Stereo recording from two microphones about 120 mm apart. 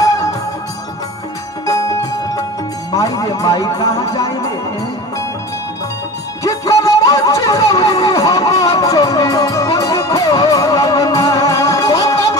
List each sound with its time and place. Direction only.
0.0 s music: 30° left (ahead or behind)
1.7 s music: 30° left (ahead or behind)
2.9 s a man's voice: 30° left (ahead or behind)
4.2 s music: 30° left (ahead or behind)
6.4 s a sound: 30° left (ahead or behind)